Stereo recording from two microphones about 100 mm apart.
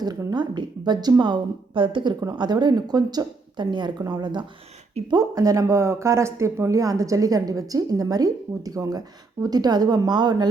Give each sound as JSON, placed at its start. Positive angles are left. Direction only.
{"t": 0.3, "sound": "speech", "side_deg": -45}
{"t": 5.1, "sound": "speech", "side_deg": -35}